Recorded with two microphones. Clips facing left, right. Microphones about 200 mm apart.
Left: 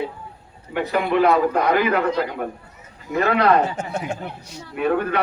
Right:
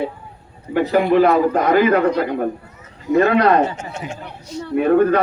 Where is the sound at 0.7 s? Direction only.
40° right (ahead or behind).